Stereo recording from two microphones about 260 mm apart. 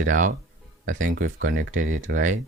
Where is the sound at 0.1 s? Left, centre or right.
Right.